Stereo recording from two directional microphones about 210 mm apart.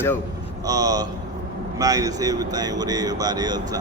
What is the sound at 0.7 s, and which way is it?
Speech, 15° right (ahead or behind).